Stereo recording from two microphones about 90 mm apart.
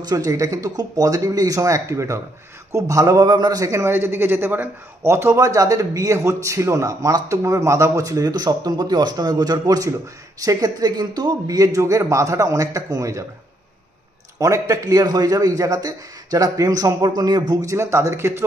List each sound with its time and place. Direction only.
0.0 s a man's voice: 40° right (ahead or behind)
14.4 s a man's voice: 35° right (ahead or behind)